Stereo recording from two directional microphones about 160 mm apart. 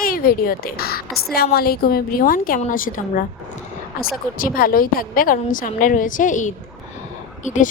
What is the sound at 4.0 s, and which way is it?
A woman's voice, 65° left (ahead or behind).